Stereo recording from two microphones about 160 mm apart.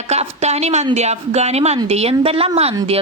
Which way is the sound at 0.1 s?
45° right (ahead or behind).